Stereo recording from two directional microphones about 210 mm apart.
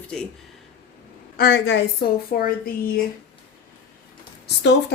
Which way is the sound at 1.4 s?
50° left (ahead or behind).